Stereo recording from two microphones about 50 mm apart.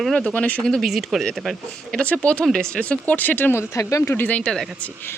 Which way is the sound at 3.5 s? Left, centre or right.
Left.